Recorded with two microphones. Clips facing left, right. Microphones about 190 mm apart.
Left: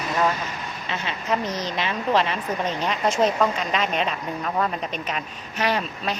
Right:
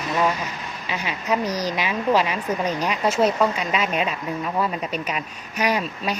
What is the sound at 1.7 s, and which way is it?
A woman's voice, 10° right (ahead or behind).